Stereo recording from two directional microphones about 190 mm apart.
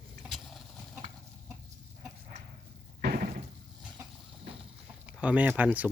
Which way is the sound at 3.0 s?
50° right (ahead or behind).